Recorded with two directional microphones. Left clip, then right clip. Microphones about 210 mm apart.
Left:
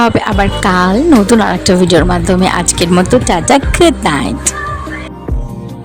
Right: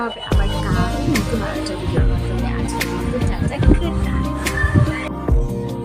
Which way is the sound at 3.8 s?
50° left (ahead or behind).